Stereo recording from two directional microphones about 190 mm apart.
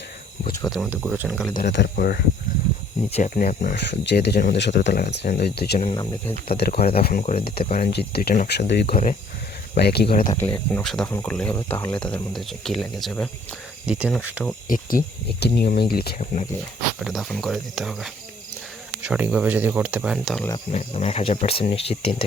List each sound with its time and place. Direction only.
0.7 s speech: 5° right (ahead or behind)
1.7 s speech: 60° left (ahead or behind); by 3.8 s 45° left (ahead or behind)
3.8 s speech: 60° left (ahead or behind)
5.8 s speech: 20° left (ahead or behind)
6.6 s speech: 55° left (ahead or behind)
7.2 s speech: 35° left (ahead or behind)
7.7 s speech: 55° left (ahead or behind)
8.9 s speech: 45° left (ahead or behind)
9.7 s speech: 55° left (ahead or behind)
10.2 s speech: 15° left (ahead or behind); by 14.4 s 10° right (ahead or behind)
14.7 s speech: 50° left (ahead or behind)
16.1 s speech: 35° left (ahead or behind)
17.0 s speech: centre (ahead or behind)
20.7 s speech: 35° left (ahead or behind)